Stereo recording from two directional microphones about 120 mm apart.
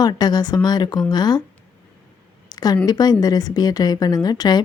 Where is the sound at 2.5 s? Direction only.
30° left (ahead or behind).